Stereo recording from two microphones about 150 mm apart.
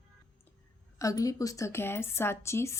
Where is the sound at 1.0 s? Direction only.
20° left (ahead or behind).